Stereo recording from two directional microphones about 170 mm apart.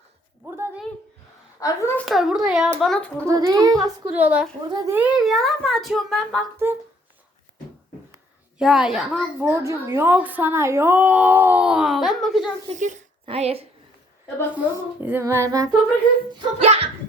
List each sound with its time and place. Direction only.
0.4 s a sound: 15° right (ahead or behind)
1.5 s a woman's voice: 20° left (ahead or behind)
2.0 s speech: centre (ahead or behind)
3.2 s a child's voice: 20° right (ahead or behind)
4.2 s a woman's voice: 10° right (ahead or behind)
6.6 s a woman's voice: 15° right (ahead or behind)
8.5 s a woman's voice: 5° right (ahead or behind)
12.6 s a child's voice: 45° right (ahead or behind)
15.0 s a woman's voice: 15° right (ahead or behind)
16.3 s a child's voice: 35° right (ahead or behind)